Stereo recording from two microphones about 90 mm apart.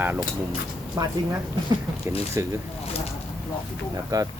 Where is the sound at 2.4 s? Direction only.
35° right (ahead or behind).